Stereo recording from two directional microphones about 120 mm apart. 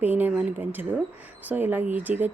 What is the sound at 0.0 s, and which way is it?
Speech, 15° right (ahead or behind).